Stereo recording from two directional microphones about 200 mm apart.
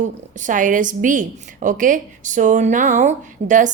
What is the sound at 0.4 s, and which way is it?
A woman's voice, 40° right (ahead or behind).